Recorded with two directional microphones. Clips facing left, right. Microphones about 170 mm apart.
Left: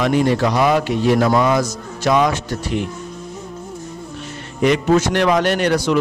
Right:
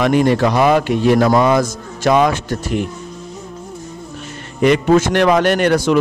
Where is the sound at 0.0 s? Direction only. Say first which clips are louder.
Right 3 dB; 60° right (ahead or behind).